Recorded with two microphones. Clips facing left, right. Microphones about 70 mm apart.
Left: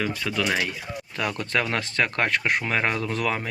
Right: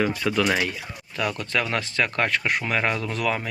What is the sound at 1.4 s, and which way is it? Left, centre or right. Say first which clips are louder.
Speech: left 2 dB; left.